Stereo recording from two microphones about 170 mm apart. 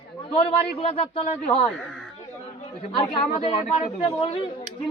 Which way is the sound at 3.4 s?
35° left (ahead or behind).